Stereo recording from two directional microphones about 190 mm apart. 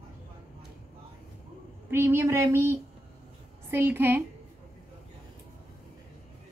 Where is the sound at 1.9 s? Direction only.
15° right (ahead or behind).